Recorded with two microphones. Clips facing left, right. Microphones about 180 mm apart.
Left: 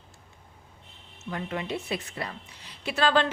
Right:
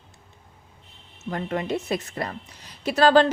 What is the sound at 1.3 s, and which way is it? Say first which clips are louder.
A woman's voice: right 5 dB; 45° right (ahead or behind).